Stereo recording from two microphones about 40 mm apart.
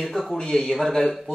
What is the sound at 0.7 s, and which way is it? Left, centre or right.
Speech, centre.